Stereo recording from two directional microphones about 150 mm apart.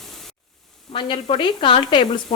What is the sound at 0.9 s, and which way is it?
Speech, 35° left (ahead or behind).